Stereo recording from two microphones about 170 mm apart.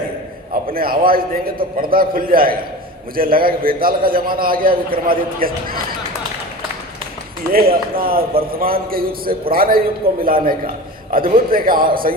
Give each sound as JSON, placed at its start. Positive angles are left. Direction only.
{"t": 0.7, "sound": "a man's voice", "side_deg": -60}
{"t": 7.5, "sound": "a man's voice", "side_deg": -60}